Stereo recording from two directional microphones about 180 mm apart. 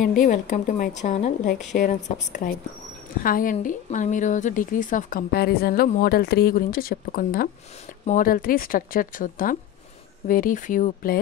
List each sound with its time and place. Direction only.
0.0 s a woman's voice: 45° left (ahead or behind)